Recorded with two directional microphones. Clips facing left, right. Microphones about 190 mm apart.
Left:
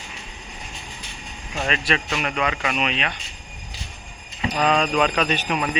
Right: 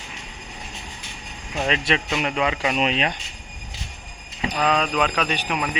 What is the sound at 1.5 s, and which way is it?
Speech, 20° right (ahead or behind).